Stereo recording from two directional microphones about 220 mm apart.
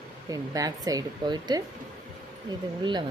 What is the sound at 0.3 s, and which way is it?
Speech, 15° right (ahead or behind).